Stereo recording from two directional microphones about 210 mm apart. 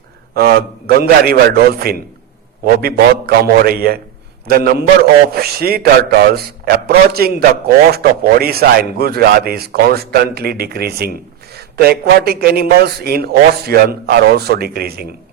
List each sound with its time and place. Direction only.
0.3 s a man's voice: 45° right (ahead or behind)